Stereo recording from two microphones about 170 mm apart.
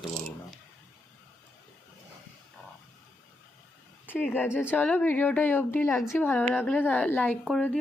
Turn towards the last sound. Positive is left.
turn(degrees=5)  # may be behind; listen again after turning